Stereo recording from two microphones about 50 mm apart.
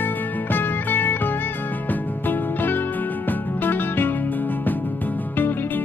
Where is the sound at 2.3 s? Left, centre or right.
Left.